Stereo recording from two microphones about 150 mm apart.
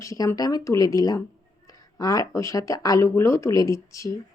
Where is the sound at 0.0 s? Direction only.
20° left (ahead or behind).